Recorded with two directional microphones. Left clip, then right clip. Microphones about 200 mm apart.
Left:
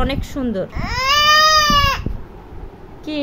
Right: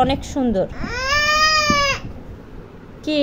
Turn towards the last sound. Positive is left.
turn(degrees=-15)  # may be behind; listen again after turning